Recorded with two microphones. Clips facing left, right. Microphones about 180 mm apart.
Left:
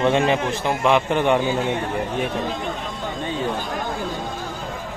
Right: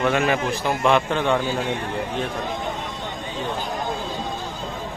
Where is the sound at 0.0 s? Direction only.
25° left (ahead or behind).